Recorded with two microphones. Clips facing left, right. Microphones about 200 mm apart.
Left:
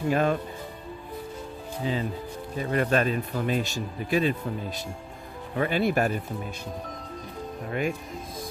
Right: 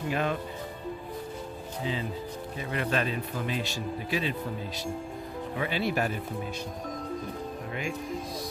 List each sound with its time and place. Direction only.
0.1 s speech: 45° left (ahead or behind)
1.8 s speech: 45° left (ahead or behind)
5.5 s speech: 50° left (ahead or behind)
7.7 s speech: 55° left (ahead or behind)